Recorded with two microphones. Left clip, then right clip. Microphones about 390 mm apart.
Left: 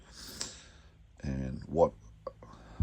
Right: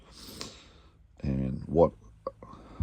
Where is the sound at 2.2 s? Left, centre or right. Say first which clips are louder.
Right 5 dB; right.